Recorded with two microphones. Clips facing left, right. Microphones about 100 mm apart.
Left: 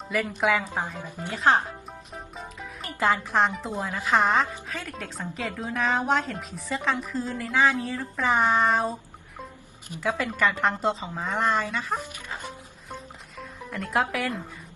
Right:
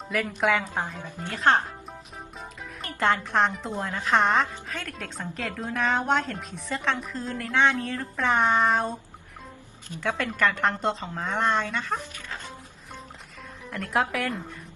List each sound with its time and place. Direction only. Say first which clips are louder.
0.1 s speech: even; centre (ahead or behind)
12.1 s dog: left 2 dB; 15° left (ahead or behind)
13.4 s speech: left 1 dB; centre (ahead or behind)